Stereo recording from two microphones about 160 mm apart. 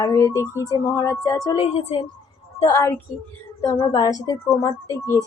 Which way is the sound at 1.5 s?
35° left (ahead or behind).